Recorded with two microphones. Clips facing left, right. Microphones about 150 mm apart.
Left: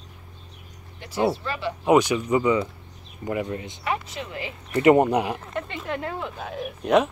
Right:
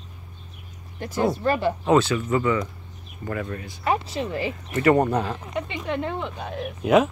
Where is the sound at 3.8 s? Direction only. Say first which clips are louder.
Right 7 dB; 35° right (ahead or behind).